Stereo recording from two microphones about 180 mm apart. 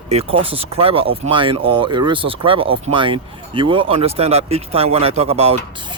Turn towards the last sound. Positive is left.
turn(degrees=-35)  # may be behind; listen again after turning